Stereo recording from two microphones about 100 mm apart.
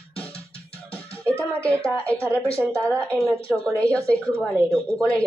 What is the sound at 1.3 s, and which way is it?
Speech, 25° right (ahead or behind).